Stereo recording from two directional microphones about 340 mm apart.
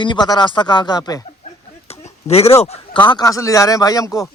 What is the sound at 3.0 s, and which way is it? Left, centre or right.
A man's voice, centre.